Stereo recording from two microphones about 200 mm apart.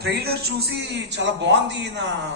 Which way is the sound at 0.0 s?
55° right (ahead or behind).